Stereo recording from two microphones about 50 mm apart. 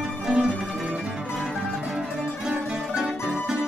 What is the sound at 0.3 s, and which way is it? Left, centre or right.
Music, centre.